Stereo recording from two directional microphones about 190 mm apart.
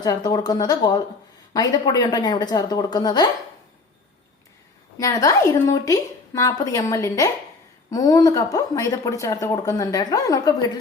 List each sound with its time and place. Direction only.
0.0 s a woman's voice: 20° left (ahead or behind)
4.9 s a woman's voice: 15° left (ahead or behind)